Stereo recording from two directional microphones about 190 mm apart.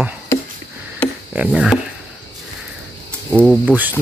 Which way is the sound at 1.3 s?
5° right (ahead or behind).